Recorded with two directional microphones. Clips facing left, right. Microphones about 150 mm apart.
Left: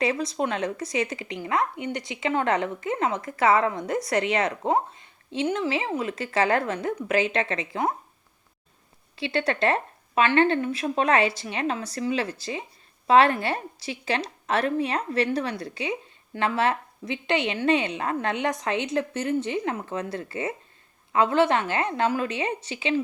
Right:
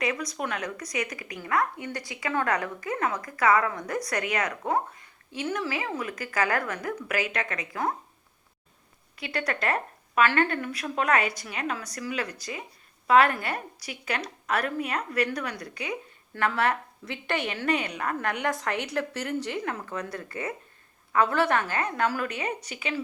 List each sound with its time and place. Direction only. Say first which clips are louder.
0.0 s speech: left 5 dB; 30° left (ahead or behind)
9.1 s speech: left 5 dB; 25° left (ahead or behind)